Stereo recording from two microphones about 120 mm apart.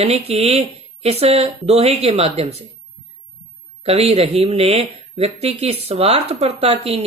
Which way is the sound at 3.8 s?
60° right (ahead or behind).